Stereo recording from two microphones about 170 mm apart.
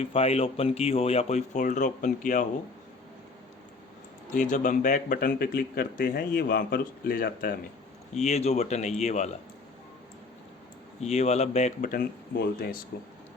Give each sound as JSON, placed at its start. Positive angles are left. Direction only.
{"t": 0.0, "sound": "speech", "side_deg": 35}
{"t": 4.3, "sound": "speech", "side_deg": 45}
{"t": 8.1, "sound": "speech", "side_deg": 40}
{"t": 11.0, "sound": "speech", "side_deg": 40}